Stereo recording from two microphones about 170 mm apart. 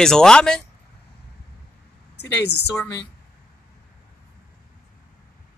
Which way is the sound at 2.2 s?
70° left (ahead or behind).